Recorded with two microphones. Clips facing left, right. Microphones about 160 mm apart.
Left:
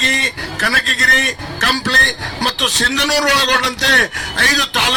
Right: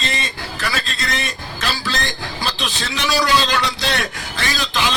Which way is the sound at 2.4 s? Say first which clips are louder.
Left 6 dB; 70° left (ahead or behind).